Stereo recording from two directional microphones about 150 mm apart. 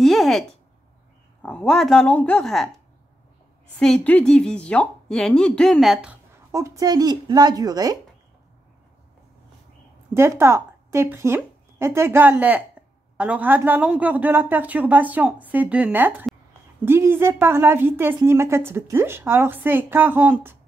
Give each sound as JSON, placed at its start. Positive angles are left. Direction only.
{"t": 0.0, "sound": "a sound", "side_deg": 0}
{"t": 1.4, "sound": "speech", "side_deg": 5}
{"t": 3.8, "sound": "speech", "side_deg": 5}
{"t": 6.5, "sound": "speech", "side_deg": -20}
{"t": 10.1, "sound": "a woman's voice", "side_deg": -15}